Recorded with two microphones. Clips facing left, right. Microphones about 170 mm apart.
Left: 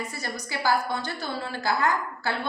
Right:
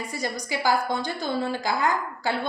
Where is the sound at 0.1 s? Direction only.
15° right (ahead or behind).